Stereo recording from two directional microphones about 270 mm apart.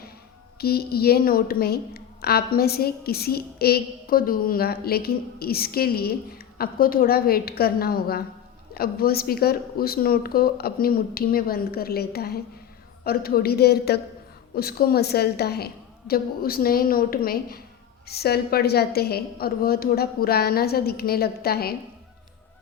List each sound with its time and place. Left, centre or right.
0.6 s a woman's voice: left